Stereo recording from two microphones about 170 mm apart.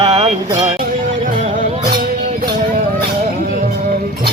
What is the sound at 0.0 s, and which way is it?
Music, 25° right (ahead or behind).